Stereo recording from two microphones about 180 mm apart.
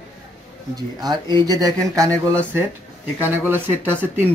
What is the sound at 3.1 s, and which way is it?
Speech, 10° right (ahead or behind).